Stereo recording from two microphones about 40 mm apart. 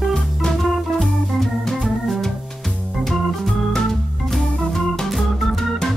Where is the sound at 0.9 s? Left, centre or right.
Centre.